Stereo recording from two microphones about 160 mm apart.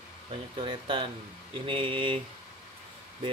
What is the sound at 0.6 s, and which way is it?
Speech, 30° right (ahead or behind).